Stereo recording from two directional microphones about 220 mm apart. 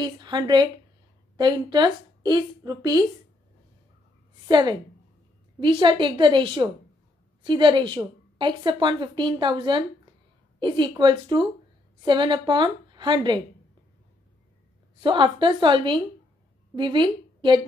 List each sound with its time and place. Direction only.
0.0 s a woman's voice: 20° right (ahead or behind)
4.5 s a woman's voice: 20° right (ahead or behind)
15.0 s a woman's voice: 20° right (ahead or behind)